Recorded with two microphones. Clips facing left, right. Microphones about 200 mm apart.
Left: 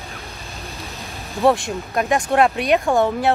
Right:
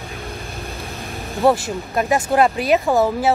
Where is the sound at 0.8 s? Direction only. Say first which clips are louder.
Right 4 dB; 50° right (ahead or behind).